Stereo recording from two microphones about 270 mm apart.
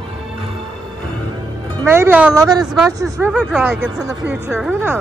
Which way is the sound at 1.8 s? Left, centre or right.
Centre.